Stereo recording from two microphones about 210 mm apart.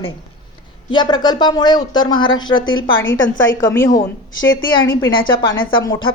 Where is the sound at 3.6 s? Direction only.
15° left (ahead or behind).